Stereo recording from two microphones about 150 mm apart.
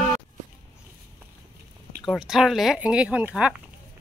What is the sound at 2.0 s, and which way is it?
Speech, centre (ahead or behind).